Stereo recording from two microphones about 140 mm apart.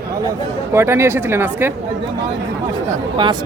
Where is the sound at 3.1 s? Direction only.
35° right (ahead or behind).